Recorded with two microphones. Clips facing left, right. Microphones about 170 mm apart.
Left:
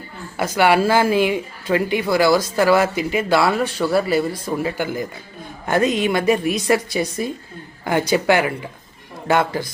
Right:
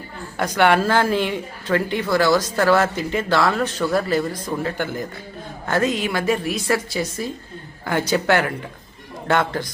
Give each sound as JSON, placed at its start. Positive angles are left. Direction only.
{"t": 0.3, "sound": "speech", "side_deg": 5}